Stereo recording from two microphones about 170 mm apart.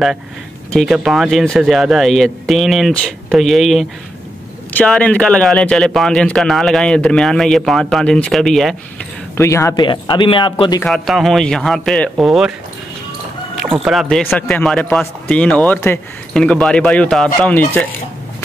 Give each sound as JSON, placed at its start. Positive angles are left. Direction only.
{"t": 0.7, "sound": "a man's voice", "side_deg": 0}
{"t": 9.4, "sound": "speech", "side_deg": 15}
{"t": 9.8, "sound": "speech", "side_deg": 25}
{"t": 10.8, "sound": "a man's voice", "side_deg": 0}
{"t": 13.6, "sound": "speech", "side_deg": 0}